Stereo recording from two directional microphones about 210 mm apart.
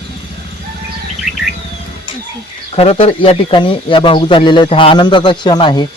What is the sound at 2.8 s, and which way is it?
Speech, 30° left (ahead or behind).